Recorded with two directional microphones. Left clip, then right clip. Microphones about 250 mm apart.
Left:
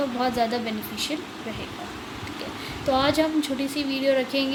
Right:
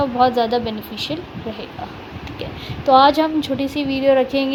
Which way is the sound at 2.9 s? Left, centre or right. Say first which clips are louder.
Right 9 dB; right.